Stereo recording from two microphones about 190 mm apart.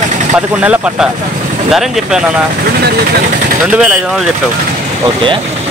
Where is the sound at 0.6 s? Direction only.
5° right (ahead or behind).